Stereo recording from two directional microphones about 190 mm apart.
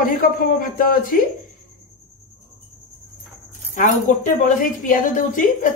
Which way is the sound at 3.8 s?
45° left (ahead or behind).